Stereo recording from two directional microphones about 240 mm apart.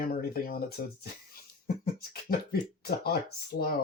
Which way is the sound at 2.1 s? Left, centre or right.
Left.